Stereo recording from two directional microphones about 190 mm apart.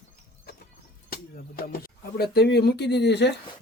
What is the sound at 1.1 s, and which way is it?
Speech, 50° left (ahead or behind).